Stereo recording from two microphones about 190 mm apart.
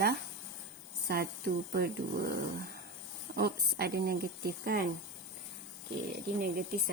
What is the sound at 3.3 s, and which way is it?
Speech, 55° right (ahead or behind).